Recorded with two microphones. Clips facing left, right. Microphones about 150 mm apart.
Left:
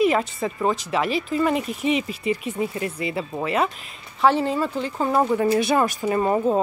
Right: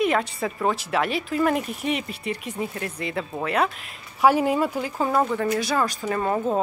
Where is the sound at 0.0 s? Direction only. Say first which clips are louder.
Left 2 dB; centre (ahead or behind).